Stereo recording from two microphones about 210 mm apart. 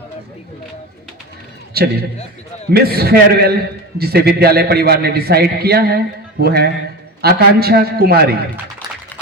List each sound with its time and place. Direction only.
1.7 s a man's voice: 50° right (ahead or behind)